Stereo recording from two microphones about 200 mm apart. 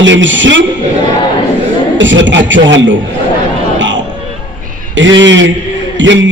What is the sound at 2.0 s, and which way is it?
A man's voice, 70° right (ahead or behind).